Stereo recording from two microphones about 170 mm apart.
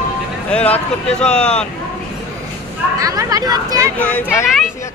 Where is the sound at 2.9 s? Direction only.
20° right (ahead or behind).